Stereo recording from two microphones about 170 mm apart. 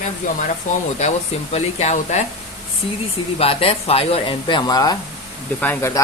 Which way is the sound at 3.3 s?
35° left (ahead or behind).